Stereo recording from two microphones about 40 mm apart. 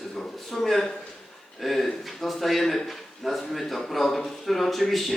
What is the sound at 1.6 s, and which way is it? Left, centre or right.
A man's voice, centre.